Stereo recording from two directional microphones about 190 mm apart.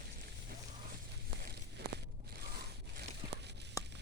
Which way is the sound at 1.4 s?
60° right (ahead or behind).